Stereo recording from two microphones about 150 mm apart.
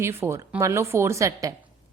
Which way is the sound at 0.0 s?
15° right (ahead or behind).